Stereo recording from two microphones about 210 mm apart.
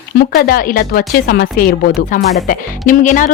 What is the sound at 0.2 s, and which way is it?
A woman's voice, 45° left (ahead or behind).